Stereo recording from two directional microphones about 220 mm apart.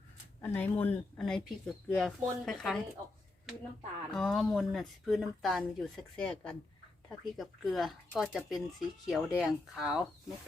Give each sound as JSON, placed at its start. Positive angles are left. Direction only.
{"t": 0.4, "sound": "speech", "side_deg": 10}
{"t": 4.1, "sound": "speech", "side_deg": 0}